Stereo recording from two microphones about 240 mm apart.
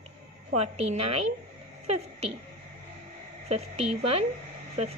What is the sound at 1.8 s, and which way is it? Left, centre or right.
Speech, right.